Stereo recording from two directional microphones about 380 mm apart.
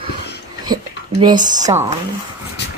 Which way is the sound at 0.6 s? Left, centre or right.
Centre.